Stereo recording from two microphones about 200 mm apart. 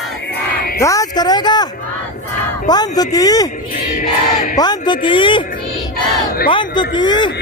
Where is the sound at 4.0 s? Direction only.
35° left (ahead or behind).